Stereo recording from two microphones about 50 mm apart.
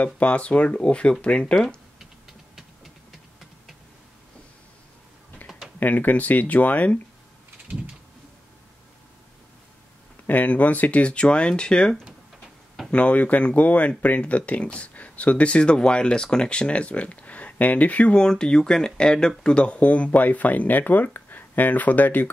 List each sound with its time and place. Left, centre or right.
0.0 s speech: left
0.7 s speech: centre
5.8 s speech: left
10.2 s speech: left; by 12.0 s centre
12.9 s speech: left
18.2 s speech: centre; by 22.3 s left